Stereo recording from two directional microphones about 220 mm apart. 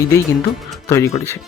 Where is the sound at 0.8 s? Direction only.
10° left (ahead or behind).